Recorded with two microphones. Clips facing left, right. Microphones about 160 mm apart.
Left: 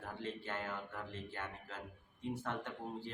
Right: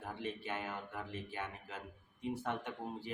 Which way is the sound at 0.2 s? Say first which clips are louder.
Right 1 dB; 15° right (ahead or behind).